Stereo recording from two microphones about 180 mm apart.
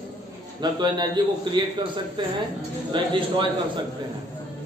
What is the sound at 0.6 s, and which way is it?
A man's voice, 25° right (ahead or behind).